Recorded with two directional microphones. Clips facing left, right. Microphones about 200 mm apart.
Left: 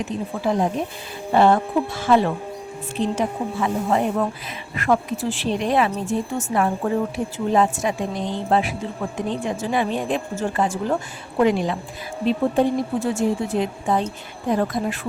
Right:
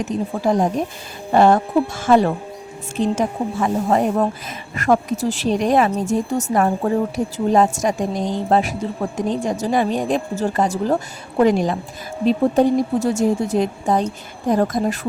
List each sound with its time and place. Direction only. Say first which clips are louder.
0.0 s a woman's voice: right 4 dB; 40° right (ahead or behind)